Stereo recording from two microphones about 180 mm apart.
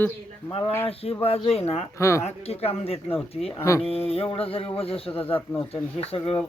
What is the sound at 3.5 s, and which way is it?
Speech, 15° left (ahead or behind).